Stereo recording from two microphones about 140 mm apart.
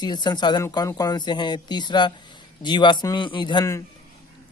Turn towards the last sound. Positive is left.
turn(degrees=35)  # may be behind; listen again after turning